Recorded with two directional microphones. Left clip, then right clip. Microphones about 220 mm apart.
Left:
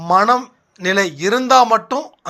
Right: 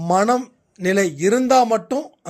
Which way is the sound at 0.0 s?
50° right (ahead or behind).